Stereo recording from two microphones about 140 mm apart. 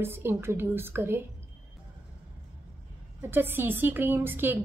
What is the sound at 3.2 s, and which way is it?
A woman's voice, 15° right (ahead or behind).